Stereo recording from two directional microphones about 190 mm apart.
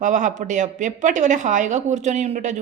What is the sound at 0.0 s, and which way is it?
Speech, 40° right (ahead or behind).